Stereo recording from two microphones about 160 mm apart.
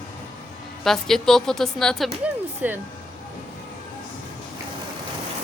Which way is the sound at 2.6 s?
10° right (ahead or behind).